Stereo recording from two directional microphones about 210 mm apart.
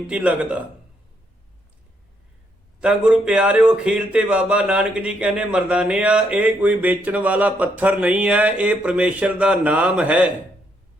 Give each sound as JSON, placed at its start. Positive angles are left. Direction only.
{"t": 0.1, "sound": "a man's voice", "side_deg": -5}
{"t": 2.8, "sound": "speech", "side_deg": -5}